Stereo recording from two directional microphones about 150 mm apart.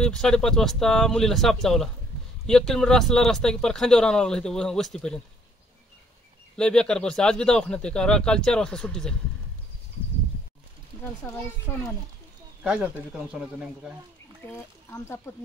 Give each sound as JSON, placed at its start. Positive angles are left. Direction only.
{"t": 0.0, "sound": "speech", "side_deg": 5}
{"t": 6.5, "sound": "speech", "side_deg": 5}
{"t": 11.0, "sound": "a child's voice", "side_deg": 15}
{"t": 12.6, "sound": "speech", "side_deg": -10}
{"t": 14.4, "sound": "speech", "side_deg": 15}